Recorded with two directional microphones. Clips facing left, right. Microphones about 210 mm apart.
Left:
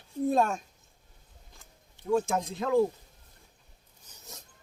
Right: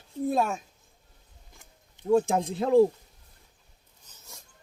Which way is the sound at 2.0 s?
35° right (ahead or behind).